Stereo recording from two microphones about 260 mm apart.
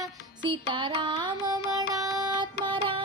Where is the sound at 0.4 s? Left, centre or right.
Centre.